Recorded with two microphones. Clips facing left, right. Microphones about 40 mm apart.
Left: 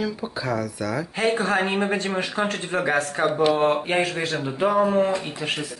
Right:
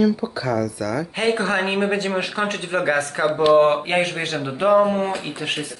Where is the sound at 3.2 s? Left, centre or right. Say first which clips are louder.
Right 6 dB; right.